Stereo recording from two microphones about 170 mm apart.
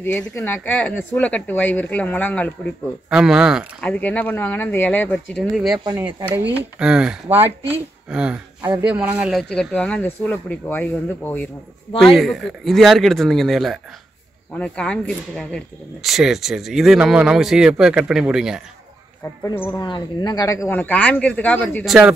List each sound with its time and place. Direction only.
0.0 s speech: 15° left (ahead or behind)
3.1 s speech: 5° right (ahead or behind)
3.8 s speech: 5° left (ahead or behind)
5.9 s speech: 20° right (ahead or behind)
19.4 s speech: 15° left (ahead or behind)
19.8 s speech: 25° left (ahead or behind); by 21.8 s 10° left (ahead or behind)
21.8 s speech: 5° right (ahead or behind)